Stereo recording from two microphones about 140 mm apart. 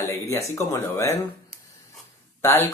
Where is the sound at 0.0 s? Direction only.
15° left (ahead or behind).